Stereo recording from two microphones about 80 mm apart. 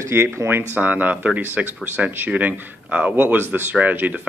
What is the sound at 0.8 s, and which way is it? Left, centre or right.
Speech, right.